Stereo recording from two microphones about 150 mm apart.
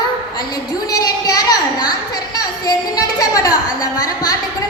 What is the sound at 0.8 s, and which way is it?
A woman's voice, 25° left (ahead or behind).